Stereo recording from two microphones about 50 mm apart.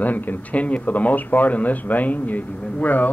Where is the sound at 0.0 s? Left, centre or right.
Left.